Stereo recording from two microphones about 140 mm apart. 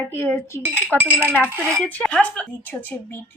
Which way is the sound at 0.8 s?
10° right (ahead or behind).